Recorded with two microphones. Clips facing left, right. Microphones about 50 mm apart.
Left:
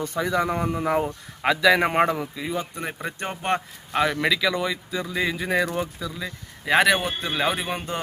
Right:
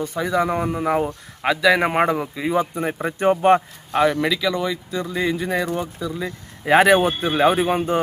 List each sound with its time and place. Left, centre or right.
0.0 s speech: centre
2.2 s speech: right; by 5.6 s centre
6.0 s speech: centre